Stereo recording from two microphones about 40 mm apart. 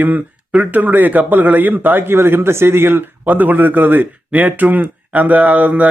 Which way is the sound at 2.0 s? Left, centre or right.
Right.